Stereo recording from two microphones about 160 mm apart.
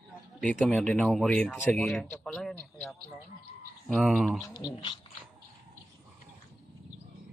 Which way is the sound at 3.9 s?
Centre (ahead or behind).